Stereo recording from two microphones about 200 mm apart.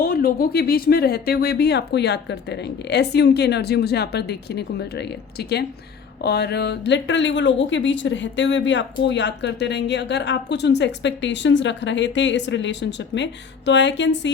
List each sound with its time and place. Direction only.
0.0 s a woman's voice: 50° left (ahead or behind); by 14.3 s 65° left (ahead or behind)